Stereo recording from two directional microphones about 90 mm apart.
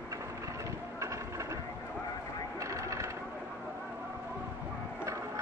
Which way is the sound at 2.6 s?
35° right (ahead or behind).